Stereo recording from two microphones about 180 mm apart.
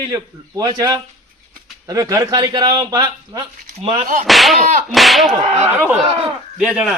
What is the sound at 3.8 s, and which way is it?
Speech, 45° right (ahead or behind).